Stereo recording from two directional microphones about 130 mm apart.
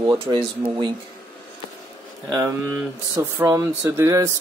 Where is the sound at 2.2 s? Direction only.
25° right (ahead or behind).